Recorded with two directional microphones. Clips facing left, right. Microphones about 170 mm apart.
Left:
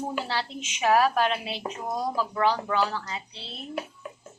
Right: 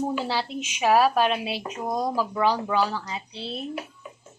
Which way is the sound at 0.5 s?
25° left (ahead or behind).